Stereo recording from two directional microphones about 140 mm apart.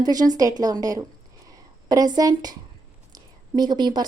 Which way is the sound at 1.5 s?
25° right (ahead or behind).